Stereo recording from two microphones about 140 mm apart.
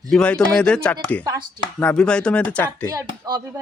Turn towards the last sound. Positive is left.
turn(degrees=-25)  # may be behind; listen again after turning